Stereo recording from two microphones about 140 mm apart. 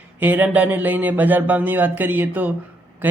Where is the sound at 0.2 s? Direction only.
15° right (ahead or behind).